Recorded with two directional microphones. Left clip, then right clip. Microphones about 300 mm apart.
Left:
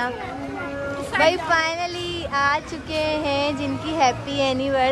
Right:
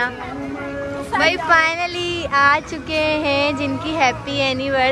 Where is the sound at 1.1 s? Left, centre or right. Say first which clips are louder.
Right 2 dB; centre.